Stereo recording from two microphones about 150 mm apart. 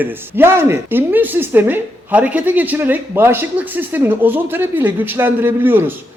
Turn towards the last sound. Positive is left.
turn(degrees=-15)  # may be behind; listen again after turning